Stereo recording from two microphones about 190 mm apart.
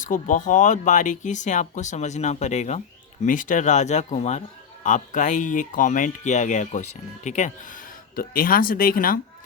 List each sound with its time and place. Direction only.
0.0 s speech: 45° left (ahead or behind)